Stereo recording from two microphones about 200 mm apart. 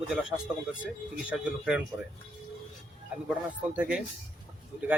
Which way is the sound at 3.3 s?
5° right (ahead or behind).